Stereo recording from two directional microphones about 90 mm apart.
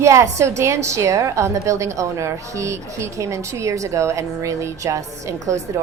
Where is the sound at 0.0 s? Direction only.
35° right (ahead or behind).